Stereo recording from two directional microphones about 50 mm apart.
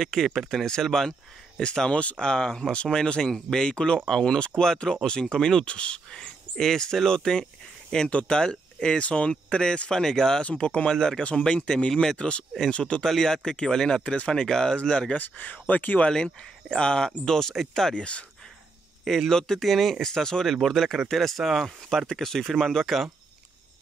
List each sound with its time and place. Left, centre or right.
0.0 s speech: centre
10.4 s speech: left
15.1 s speech: left
16.0 s speech: centre
17.9 s speech: left
19.0 s speech: centre